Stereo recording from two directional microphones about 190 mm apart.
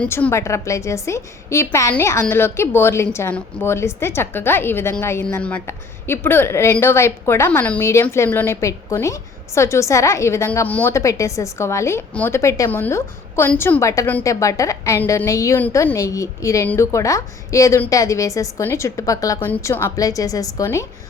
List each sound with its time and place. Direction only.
0.0 s a woman's voice: 10° left (ahead or behind)